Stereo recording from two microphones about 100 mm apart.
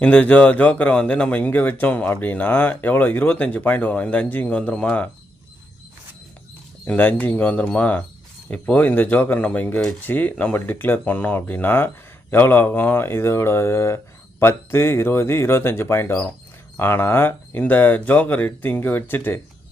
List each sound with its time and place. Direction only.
0.0 s speech: 15° left (ahead or behind)
6.8 s speech: 15° left (ahead or behind)